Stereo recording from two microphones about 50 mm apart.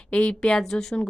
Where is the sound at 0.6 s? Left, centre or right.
Centre.